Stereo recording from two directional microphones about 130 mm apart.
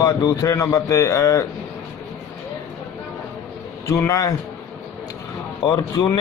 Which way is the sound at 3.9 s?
25° left (ahead or behind).